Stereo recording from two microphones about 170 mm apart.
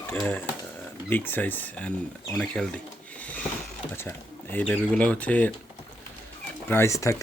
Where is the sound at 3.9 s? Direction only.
10° left (ahead or behind).